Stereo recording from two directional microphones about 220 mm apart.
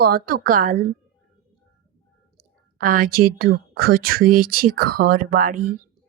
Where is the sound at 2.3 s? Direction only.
40° right (ahead or behind).